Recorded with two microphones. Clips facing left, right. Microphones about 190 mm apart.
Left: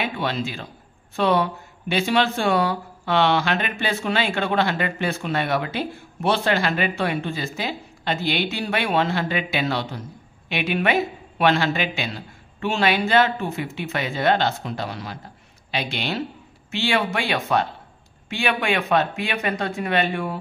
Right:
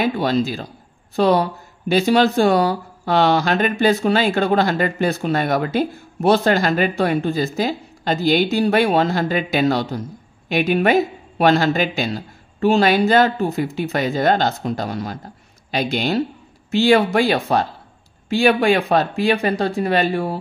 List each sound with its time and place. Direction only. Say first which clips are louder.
0.0 s speech: right 7 dB; 40° right (ahead or behind)